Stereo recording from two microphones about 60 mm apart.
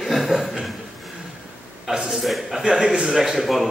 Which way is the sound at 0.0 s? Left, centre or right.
Centre.